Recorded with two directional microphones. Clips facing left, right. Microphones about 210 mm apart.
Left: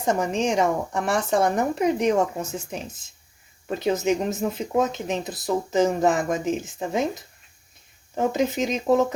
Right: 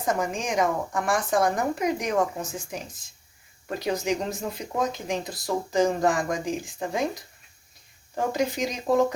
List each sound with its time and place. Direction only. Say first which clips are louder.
0.0 s speech: left 4 dB; 25° left (ahead or behind)